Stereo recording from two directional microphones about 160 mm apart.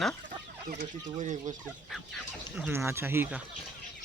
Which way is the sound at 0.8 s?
50° right (ahead or behind).